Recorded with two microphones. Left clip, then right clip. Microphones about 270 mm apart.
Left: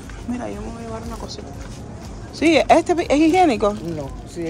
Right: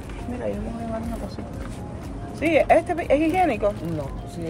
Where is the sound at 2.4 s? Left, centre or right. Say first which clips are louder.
Left 4 dB; left.